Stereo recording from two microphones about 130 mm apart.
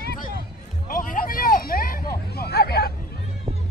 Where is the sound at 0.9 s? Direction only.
90° left.